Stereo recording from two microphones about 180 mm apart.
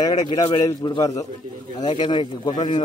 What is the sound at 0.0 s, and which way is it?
Speech, 25° left (ahead or behind).